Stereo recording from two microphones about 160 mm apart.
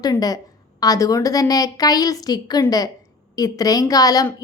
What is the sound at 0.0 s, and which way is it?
A woman's voice, 25° left (ahead or behind).